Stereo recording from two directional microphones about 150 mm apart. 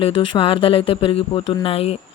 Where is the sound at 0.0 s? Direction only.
35° left (ahead or behind).